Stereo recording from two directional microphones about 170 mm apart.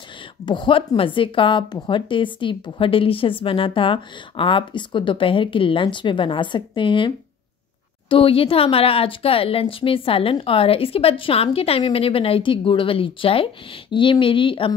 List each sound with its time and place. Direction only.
0.5 s a woman's voice: 30° left (ahead or behind)
8.1 s speech: 30° left (ahead or behind)